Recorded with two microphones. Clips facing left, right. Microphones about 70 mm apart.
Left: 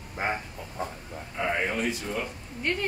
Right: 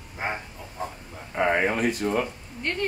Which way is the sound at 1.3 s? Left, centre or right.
Right.